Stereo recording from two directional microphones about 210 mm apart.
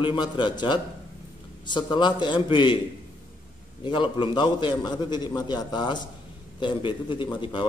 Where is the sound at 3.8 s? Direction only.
20° left (ahead or behind).